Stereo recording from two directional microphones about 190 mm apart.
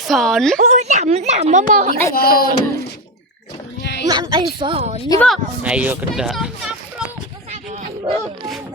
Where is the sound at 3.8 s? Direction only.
65° left (ahead or behind).